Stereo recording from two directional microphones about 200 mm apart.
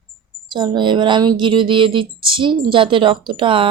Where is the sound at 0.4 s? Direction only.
20° right (ahead or behind).